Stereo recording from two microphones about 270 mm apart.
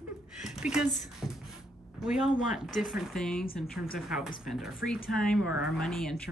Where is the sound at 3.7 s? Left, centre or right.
Left.